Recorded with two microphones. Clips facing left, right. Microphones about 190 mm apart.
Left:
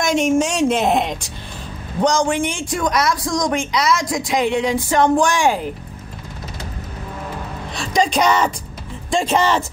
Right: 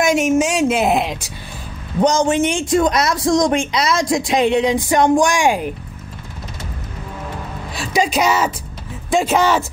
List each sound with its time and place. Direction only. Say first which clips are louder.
0.0 s a woman's voice: right 2 dB; 5° right (ahead or behind)
2.0 s speech: right 2 dB; 20° right (ahead or behind)
7.7 s a woman's voice: even; 5° right (ahead or behind)